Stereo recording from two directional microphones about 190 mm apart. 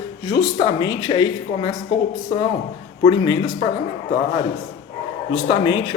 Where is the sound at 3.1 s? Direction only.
25° left (ahead or behind).